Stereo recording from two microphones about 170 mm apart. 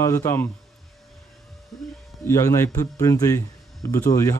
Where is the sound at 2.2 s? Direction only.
15° left (ahead or behind).